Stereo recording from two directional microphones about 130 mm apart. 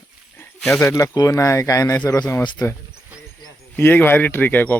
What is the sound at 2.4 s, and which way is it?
Speech, 35° left (ahead or behind).